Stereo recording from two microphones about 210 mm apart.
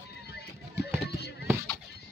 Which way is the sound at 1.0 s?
50° left (ahead or behind).